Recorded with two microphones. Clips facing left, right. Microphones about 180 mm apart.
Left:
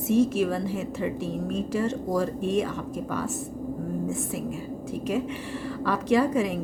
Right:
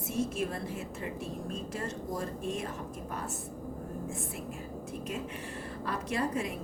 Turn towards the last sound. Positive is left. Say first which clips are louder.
# left 10 dB
turn(degrees=85)